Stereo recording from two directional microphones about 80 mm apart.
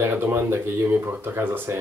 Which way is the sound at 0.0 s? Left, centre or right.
Right.